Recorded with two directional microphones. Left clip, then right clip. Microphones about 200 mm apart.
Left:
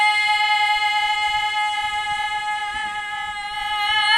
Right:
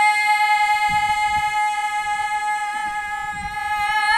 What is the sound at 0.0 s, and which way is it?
Music, 55° left (ahead or behind).